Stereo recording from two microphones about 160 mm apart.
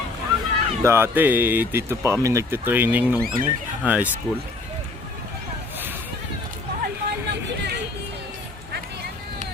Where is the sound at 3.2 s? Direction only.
65° right (ahead or behind).